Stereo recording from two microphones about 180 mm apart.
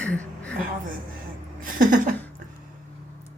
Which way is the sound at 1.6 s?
50° right (ahead or behind).